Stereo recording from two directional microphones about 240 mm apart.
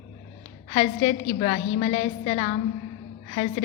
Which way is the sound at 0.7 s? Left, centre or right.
Left.